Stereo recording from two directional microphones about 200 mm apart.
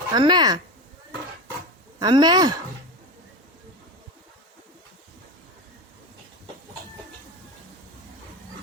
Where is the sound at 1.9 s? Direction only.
20° right (ahead or behind).